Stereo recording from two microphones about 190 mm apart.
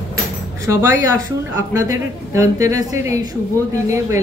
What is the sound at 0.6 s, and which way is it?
A woman's voice, 15° right (ahead or behind).